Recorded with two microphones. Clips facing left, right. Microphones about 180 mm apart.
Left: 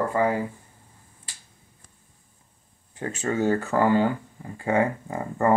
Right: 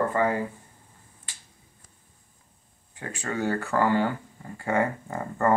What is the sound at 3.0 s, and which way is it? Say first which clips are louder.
Speech: left 5 dB; 25° left (ahead or behind).